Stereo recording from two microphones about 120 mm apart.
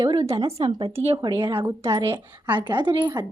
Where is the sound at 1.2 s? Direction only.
40° right (ahead or behind).